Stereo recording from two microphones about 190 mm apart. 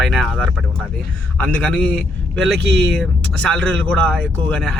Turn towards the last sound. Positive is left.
turn(degrees=5)  # may be behind; listen again after turning